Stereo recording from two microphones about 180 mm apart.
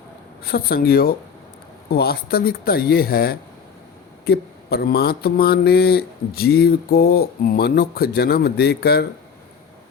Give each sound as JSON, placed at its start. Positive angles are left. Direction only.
{"t": 0.4, "sound": "speech", "side_deg": 55}